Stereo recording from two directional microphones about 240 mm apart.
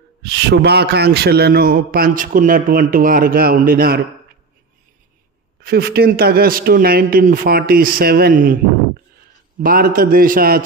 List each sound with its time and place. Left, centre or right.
0.2 s a man's voice: right
5.6 s a man's voice: right
9.6 s a man's voice: right